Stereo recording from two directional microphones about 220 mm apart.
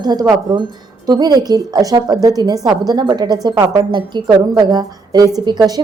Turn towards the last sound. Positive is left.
turn(degrees=-20)  # may be behind; listen again after turning